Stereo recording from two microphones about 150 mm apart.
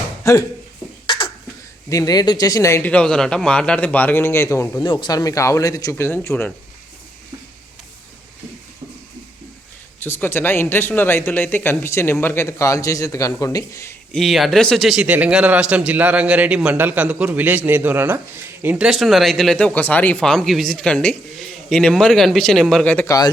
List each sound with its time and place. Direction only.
0.3 s speech: 20° left (ahead or behind)
1.0 s a sound: 35° left (ahead or behind)
1.9 s speech: 25° left (ahead or behind)
2.9 s speech: 5° left (ahead or behind)
10.0 s speech: 15° left (ahead or behind)
14.1 s a man's voice: centre (ahead or behind)
23.0 s speech: 25° left (ahead or behind)